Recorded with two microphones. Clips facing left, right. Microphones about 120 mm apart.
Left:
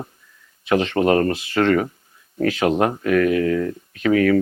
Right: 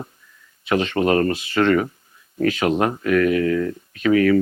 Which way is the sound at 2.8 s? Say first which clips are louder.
Even; 25° left (ahead or behind).